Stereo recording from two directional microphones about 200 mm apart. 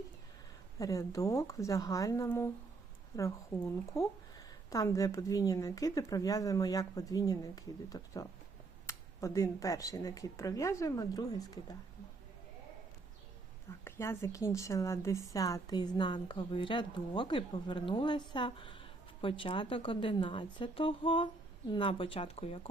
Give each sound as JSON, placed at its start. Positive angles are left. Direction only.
{"t": 0.8, "sound": "a woman's voice", "side_deg": 15}
{"t": 13.8, "sound": "a woman's voice", "side_deg": 10}